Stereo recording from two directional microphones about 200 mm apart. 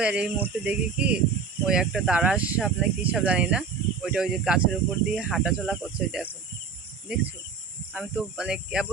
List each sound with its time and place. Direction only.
0.0 s speech: 5° right (ahead or behind)
7.9 s speech: 5° right (ahead or behind)